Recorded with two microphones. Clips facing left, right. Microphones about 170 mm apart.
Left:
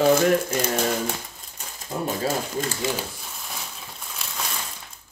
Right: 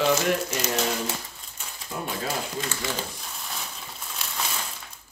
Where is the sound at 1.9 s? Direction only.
35° left (ahead or behind).